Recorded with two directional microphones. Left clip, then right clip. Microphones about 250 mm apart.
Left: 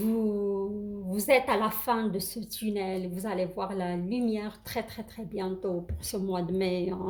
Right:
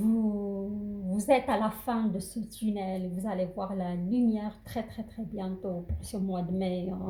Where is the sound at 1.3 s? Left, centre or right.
Left.